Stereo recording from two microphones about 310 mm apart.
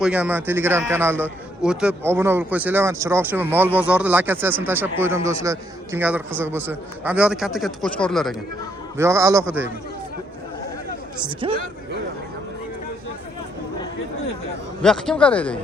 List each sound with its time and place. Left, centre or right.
0.0 s a man's voice: centre
11.2 s a man's voice: centre
14.8 s speech: centre